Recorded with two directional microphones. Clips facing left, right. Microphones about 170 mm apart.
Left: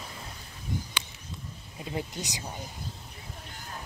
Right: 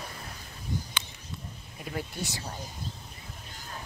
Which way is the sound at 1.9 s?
20° left (ahead or behind).